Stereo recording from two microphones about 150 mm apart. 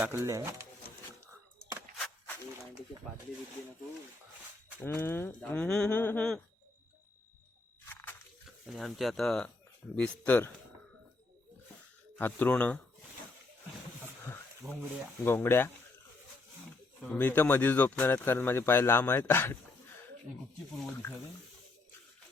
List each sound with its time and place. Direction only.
0.0 s speech: 20° right (ahead or behind)
4.8 s speech: 15° left (ahead or behind)
5.5 s speech: 5° left (ahead or behind)
7.9 s biting: 15° left (ahead or behind)
8.4 s speech: centre (ahead or behind)
12.1 s speech: 10° left (ahead or behind)
14.6 s speech: 10° right (ahead or behind)
15.2 s speech: 15° left (ahead or behind)
17.0 s speech: 10° left (ahead or behind)